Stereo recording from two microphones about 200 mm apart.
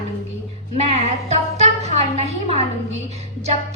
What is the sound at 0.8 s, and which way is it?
A woman's voice, 30° right (ahead or behind).